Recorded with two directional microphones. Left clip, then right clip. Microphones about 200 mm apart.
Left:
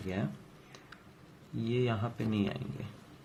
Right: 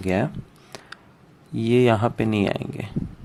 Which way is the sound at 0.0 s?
45° right (ahead or behind).